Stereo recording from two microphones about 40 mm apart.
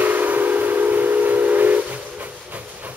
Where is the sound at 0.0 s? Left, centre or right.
Right.